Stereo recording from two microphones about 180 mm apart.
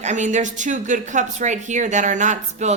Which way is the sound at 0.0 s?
40° right (ahead or behind).